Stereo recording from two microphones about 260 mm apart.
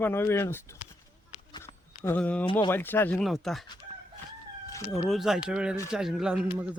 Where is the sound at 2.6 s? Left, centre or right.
Centre.